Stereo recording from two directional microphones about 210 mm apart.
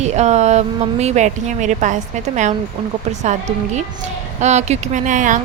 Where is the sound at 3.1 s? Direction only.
35° right (ahead or behind).